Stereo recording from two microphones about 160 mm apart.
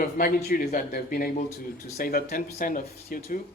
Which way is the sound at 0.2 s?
65° left (ahead or behind).